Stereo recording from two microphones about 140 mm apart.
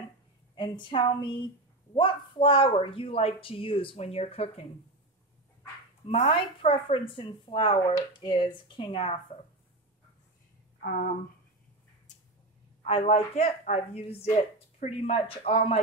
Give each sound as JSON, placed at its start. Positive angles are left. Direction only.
{"t": 0.6, "sound": "speech", "side_deg": 35}
{"t": 6.1, "sound": "speech", "side_deg": 50}
{"t": 10.8, "sound": "a sound", "side_deg": 90}
{"t": 12.8, "sound": "a woman's voice", "side_deg": 50}